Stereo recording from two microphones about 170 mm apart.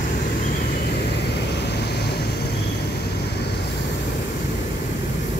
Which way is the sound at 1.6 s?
80° left.